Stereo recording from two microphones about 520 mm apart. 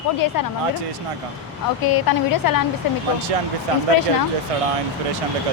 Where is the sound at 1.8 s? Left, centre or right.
Left.